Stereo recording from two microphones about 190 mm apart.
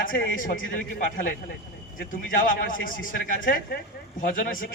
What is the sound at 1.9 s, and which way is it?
A man's voice, 45° left (ahead or behind).